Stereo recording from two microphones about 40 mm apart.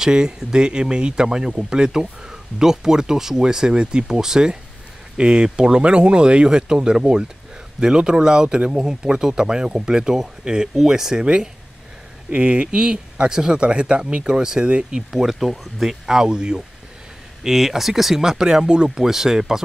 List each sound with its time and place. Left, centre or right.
0.0 s speech: centre
12.3 s speech: right
15.3 s speech: centre
16.2 s speech: right
17.4 s speech: centre